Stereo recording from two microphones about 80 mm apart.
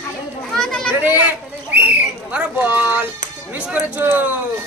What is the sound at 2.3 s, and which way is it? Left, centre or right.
Speech, centre.